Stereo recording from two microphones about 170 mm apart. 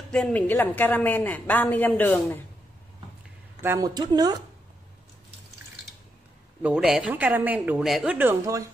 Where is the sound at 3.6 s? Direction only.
20° right (ahead or behind).